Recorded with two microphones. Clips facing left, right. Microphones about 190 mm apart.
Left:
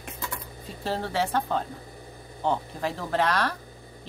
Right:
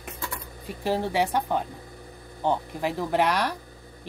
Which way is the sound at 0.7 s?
15° right (ahead or behind).